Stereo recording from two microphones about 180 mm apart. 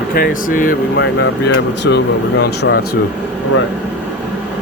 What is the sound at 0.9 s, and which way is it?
Speech, 80° left.